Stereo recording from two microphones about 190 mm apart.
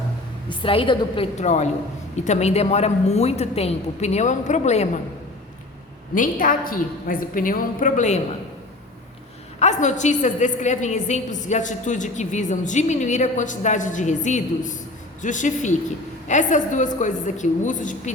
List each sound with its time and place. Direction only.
0.6 s a woman's voice: 25° left (ahead or behind)
6.1 s a woman's voice: 45° left (ahead or behind)
9.6 s a woman's voice: 40° left (ahead or behind)